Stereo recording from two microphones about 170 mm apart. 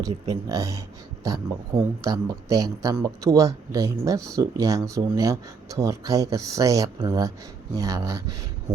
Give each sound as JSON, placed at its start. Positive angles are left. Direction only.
{"t": 0.3, "sound": "speech", "side_deg": -20}